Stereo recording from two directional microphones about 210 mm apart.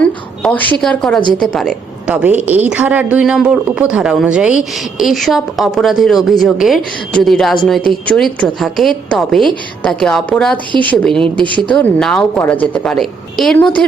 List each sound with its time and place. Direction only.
0.0 s a woman's voice: 5° left (ahead or behind)
11.3 s a woman's voice: 25° right (ahead or behind)
11.7 s a woman's voice: 5° left (ahead or behind)